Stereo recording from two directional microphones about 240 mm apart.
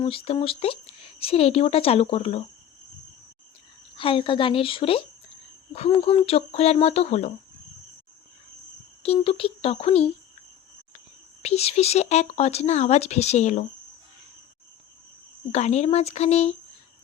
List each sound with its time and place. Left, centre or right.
0.0 s speech: left
3.9 s speech: left
9.0 s speech: left
11.4 s speech: left
15.5 s speech: left